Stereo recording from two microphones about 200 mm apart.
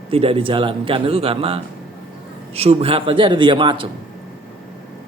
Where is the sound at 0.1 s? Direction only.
30° right (ahead or behind).